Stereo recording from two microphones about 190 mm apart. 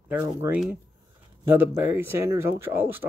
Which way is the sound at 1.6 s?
10° right (ahead or behind).